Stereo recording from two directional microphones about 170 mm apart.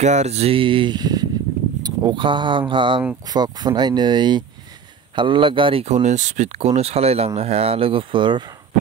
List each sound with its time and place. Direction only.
0.0 s speech: 40° right (ahead or behind)